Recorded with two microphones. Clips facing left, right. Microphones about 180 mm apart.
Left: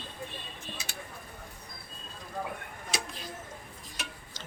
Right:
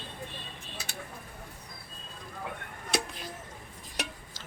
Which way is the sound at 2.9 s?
60° right (ahead or behind).